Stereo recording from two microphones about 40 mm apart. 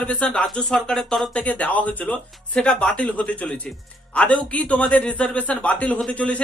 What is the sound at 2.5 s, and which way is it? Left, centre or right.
Speech, left.